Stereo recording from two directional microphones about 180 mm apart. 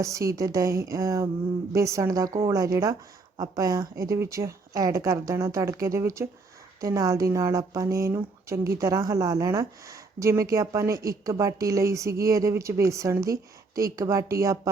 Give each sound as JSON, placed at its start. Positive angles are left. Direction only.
{"t": 0.0, "sound": "a woman's voice", "side_deg": -15}